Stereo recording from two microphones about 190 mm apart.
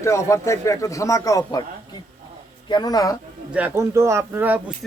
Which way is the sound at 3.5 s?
10° right (ahead or behind).